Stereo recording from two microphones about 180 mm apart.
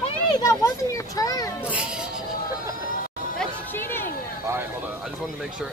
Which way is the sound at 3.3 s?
10° left (ahead or behind).